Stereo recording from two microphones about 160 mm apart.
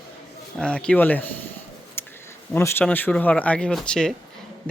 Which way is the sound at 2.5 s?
10° left (ahead or behind).